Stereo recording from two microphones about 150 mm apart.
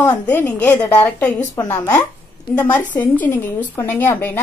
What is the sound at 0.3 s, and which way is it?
A woman's voice, 10° left (ahead or behind).